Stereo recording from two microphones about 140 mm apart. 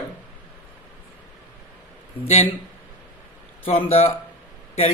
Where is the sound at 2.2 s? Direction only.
50° left (ahead or behind).